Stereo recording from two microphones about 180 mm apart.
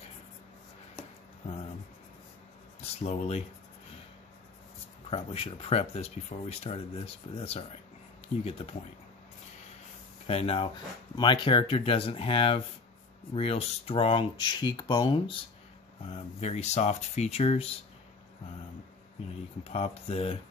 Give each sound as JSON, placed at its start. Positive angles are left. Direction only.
{"t": 2.8, "sound": "speech", "side_deg": 35}
{"t": 5.1, "sound": "speech", "side_deg": 30}
{"t": 10.2, "sound": "speech", "side_deg": 35}
{"t": 19.6, "sound": "speech", "side_deg": 35}